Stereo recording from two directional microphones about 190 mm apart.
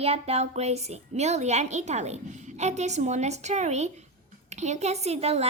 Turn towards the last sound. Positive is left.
turn(degrees=-35)  # may be behind; listen again after turning